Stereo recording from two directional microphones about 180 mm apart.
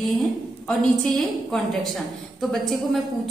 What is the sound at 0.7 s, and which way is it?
Speech, centre (ahead or behind).